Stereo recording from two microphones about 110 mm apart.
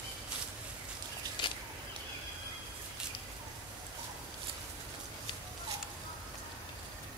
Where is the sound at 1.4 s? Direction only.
45° left (ahead or behind).